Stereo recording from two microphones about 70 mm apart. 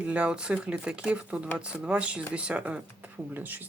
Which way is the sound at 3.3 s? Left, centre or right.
Right.